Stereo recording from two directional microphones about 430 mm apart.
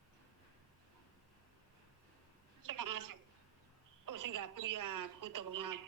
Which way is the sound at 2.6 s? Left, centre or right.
Right.